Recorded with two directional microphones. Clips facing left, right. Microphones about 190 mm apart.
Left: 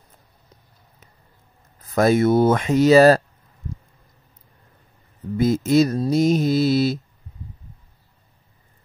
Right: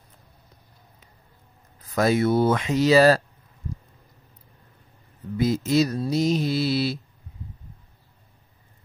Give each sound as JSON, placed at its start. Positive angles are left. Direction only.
{"t": 2.0, "sound": "mantra", "side_deg": 50}
{"t": 5.4, "sound": "mantra", "side_deg": 50}